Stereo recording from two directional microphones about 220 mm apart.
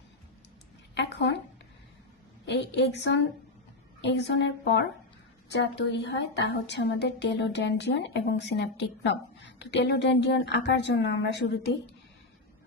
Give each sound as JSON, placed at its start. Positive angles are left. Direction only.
{"t": 0.9, "sound": "a woman's voice", "side_deg": 50}
{"t": 2.5, "sound": "a woman's voice", "side_deg": 50}